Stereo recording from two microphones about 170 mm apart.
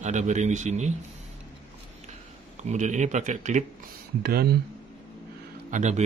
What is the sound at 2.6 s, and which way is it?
Speech, 45° right (ahead or behind).